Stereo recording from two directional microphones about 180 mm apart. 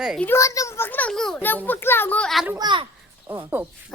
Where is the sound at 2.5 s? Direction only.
25° right (ahead or behind).